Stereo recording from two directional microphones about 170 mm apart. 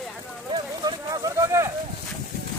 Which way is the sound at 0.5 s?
25° right (ahead or behind).